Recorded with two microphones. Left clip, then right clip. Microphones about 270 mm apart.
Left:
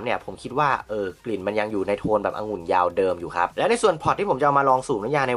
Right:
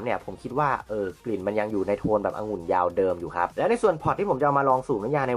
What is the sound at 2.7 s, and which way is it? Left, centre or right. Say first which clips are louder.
Speech: left 3 dB; centre.